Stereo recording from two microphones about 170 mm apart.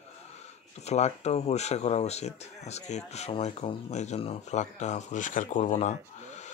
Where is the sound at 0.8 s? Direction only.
40° left (ahead or behind).